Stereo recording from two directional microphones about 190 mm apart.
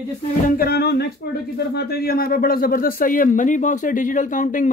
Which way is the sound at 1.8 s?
55° left (ahead or behind).